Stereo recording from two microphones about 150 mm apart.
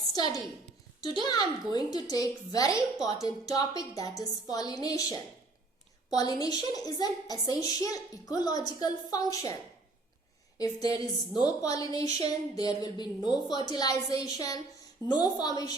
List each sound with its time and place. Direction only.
0.1 s a woman's voice: 25° left (ahead or behind)
10.6 s a woman's voice: 25° left (ahead or behind)